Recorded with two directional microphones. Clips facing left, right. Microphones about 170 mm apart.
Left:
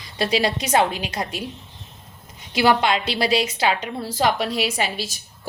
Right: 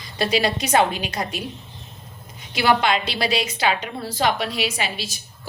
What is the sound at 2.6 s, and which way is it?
A woman's voice, 30° left (ahead or behind).